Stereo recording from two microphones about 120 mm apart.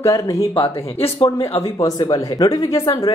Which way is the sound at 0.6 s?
55° left (ahead or behind).